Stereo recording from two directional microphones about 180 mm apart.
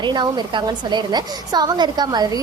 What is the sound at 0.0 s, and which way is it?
A woman's voice, 25° right (ahead or behind).